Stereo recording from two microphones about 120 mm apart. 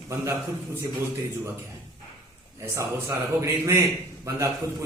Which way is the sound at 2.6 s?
25° right (ahead or behind).